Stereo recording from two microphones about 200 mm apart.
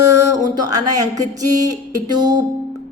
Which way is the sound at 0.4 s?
20° right (ahead or behind).